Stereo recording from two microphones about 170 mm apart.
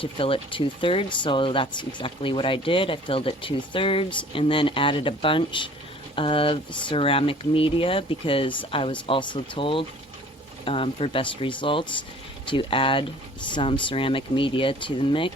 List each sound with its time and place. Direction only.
0.0 s speech: 30° left (ahead or behind)